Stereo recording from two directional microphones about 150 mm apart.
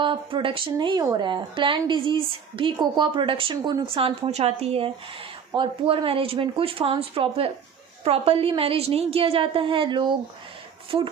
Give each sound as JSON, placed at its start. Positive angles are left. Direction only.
{"t": 0.0, "sound": "speech", "side_deg": -35}